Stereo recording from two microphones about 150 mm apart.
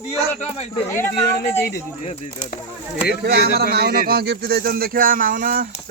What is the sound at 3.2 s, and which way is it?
Speech, 90° right.